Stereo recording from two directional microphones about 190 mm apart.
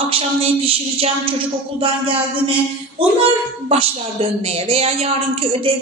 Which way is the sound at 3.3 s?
30° right (ahead or behind).